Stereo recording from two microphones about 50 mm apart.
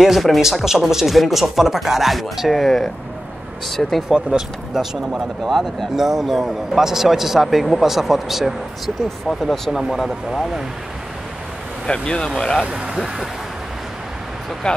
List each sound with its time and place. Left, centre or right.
0.0 s speech: centre
4.1 s speech: centre
5.4 s speech: centre
11.9 s speech: centre
12.6 s speech: centre
12.9 s speech: centre